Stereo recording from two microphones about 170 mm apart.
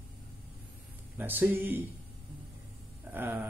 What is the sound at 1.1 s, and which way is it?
Speech, 10° right (ahead or behind).